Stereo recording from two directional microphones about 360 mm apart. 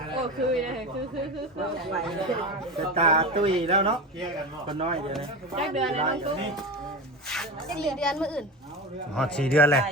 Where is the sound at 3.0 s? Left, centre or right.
Centre.